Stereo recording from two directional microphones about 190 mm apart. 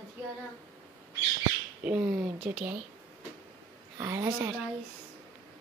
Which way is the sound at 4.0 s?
15° right (ahead or behind).